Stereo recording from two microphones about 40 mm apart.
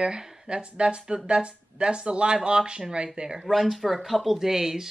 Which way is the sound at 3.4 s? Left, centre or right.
Centre.